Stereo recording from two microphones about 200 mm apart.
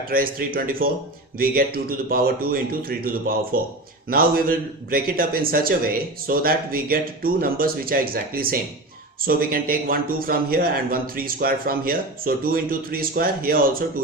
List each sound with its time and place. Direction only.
0.1 s a man's voice: 45° right (ahead or behind)